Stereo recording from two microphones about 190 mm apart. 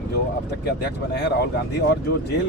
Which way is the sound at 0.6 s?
60° left (ahead or behind).